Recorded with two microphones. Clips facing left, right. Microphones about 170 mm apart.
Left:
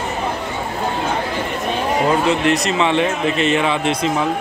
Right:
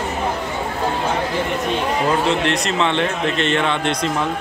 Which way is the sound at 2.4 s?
5° left (ahead or behind).